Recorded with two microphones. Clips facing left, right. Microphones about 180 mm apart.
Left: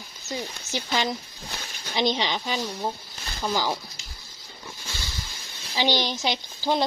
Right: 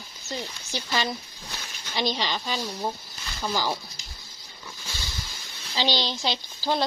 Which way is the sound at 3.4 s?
15° left (ahead or behind).